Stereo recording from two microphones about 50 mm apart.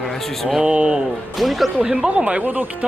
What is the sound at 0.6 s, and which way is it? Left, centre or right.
Speech, centre.